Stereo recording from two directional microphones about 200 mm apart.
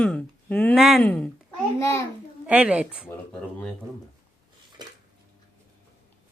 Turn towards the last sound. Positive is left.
turn(degrees=-20)  # may be behind; listen again after turning